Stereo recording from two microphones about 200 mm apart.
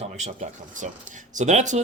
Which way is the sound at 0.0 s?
30° right (ahead or behind).